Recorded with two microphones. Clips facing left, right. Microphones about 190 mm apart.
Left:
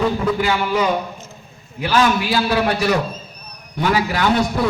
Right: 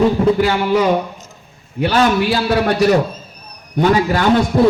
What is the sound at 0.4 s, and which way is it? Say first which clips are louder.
Speech: right 4 dB; 45° right (ahead or behind).